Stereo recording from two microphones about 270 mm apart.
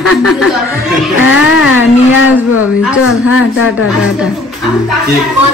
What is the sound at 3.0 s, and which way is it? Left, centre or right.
Speech, left.